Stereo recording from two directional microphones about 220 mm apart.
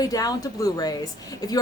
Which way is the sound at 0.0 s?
15° left (ahead or behind).